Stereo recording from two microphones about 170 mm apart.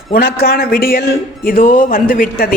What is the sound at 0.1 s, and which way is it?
Speech, 65° left (ahead or behind).